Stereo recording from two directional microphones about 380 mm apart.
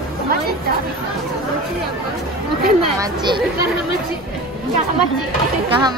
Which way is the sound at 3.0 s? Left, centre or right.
Centre.